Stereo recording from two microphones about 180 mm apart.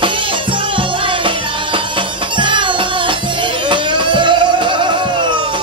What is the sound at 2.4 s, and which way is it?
Music, 25° right (ahead or behind).